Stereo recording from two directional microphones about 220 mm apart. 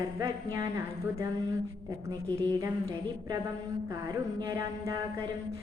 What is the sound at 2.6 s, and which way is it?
A woman's voice, 15° right (ahead or behind).